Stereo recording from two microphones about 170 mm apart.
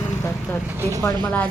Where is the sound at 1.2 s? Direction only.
10° left (ahead or behind).